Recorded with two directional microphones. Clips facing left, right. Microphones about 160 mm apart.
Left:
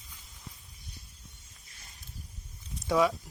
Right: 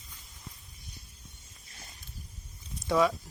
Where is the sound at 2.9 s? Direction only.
10° left (ahead or behind).